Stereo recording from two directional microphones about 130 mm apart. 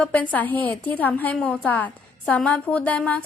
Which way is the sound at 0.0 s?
10° left (ahead or behind).